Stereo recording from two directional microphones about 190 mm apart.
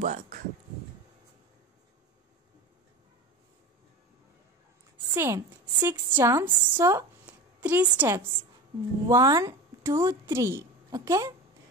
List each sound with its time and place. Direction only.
0.0 s speech: 40° right (ahead or behind)
5.1 s a woman's voice: 15° right (ahead or behind)